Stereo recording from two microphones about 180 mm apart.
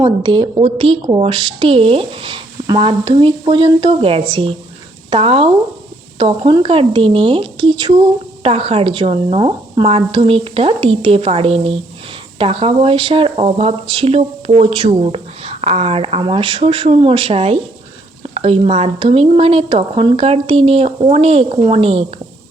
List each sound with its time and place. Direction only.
0.0 s a woman's voice: 25° right (ahead or behind)